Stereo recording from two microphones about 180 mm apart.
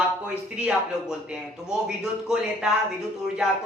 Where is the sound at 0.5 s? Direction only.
5° right (ahead or behind).